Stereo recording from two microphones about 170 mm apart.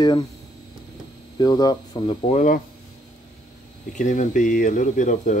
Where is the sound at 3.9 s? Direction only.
45° left (ahead or behind).